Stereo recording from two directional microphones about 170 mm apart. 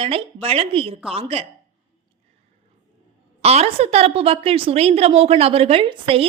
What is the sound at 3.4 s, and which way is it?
A woman's voice, 35° right (ahead or behind).